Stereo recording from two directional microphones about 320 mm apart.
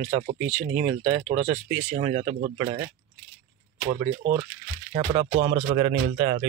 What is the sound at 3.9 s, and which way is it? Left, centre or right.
Speech, centre.